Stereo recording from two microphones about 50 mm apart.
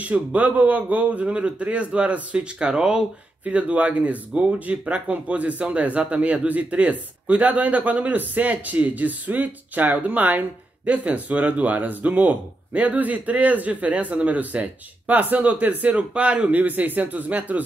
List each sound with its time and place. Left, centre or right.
0.0 s a man's voice: right
3.4 s speech: right